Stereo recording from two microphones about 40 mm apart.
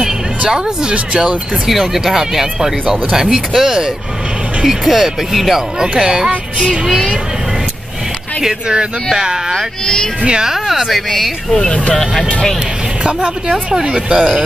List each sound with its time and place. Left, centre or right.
0.9 s speech: right
1.7 s speech: centre
5.8 s speech: centre
9.1 s speech: centre
10.5 s speech: centre
11.5 s speech: centre
13.0 s speech: right